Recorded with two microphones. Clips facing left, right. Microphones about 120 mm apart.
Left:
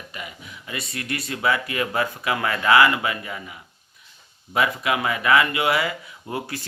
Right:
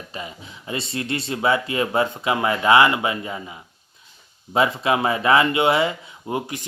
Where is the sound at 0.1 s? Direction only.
30° right (ahead or behind).